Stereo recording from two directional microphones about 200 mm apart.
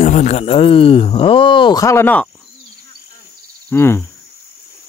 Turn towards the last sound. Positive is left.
turn(degrees=10)  # may be behind; listen again after turning